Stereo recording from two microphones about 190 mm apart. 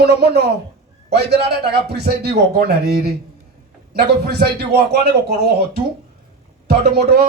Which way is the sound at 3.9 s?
55° right (ahead or behind).